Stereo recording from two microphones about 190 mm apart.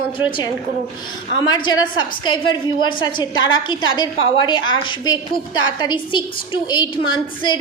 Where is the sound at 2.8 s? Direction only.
25° left (ahead or behind).